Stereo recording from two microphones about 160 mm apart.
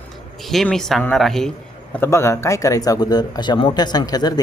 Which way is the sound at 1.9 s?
15° left (ahead or behind).